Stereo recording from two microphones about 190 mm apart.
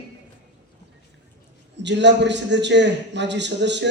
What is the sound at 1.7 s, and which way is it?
A man's voice, 65° right (ahead or behind).